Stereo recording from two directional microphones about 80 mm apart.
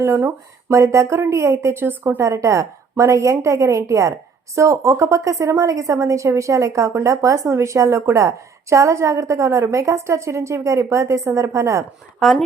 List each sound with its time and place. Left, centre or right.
0.0 s a woman's voice: right
2.2 s a woman's voice: right
12.2 s a woman's voice: centre